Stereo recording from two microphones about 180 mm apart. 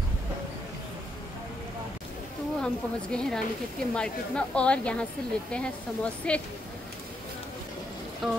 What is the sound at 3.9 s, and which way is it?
A woman's voice, 5° left (ahead or behind).